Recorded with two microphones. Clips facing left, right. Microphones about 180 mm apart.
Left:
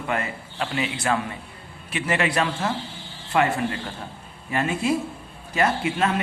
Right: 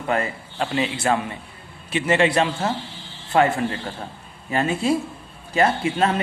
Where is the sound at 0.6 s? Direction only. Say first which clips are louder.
Right 4 dB; 30° right (ahead or behind).